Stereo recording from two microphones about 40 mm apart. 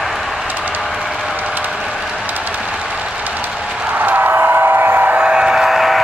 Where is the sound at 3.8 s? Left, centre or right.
Right.